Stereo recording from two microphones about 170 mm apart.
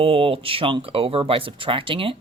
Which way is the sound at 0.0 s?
35° right (ahead or behind).